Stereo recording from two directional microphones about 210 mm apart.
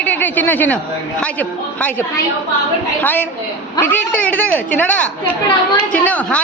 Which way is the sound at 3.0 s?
10° left (ahead or behind).